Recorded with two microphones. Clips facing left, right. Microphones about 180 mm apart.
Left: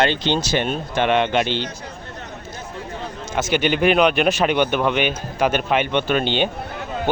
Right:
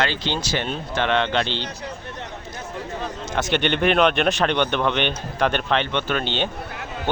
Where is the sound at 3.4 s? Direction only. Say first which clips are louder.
Left 2 dB; 5° left (ahead or behind).